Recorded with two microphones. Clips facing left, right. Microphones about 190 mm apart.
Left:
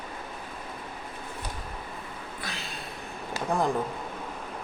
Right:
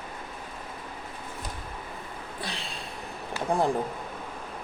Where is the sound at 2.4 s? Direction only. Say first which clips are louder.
Right 2 dB; 30° right (ahead or behind).